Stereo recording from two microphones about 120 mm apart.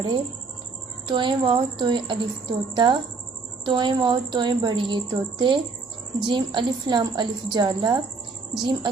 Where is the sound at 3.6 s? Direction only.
40° right (ahead or behind).